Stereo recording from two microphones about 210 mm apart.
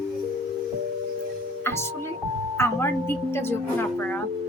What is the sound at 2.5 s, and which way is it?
A woman's voice, 10° left (ahead or behind).